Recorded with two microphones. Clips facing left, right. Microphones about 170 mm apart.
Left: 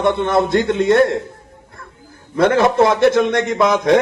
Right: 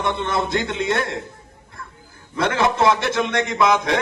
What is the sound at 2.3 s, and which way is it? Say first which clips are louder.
A man's voice: left 7 dB; 50° left (ahead or behind).